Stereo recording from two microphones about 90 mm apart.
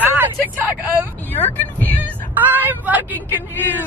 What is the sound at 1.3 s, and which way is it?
Speech, 20° left (ahead or behind).